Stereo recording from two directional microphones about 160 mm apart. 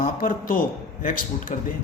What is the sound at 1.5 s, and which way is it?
Speech, 45° left (ahead or behind).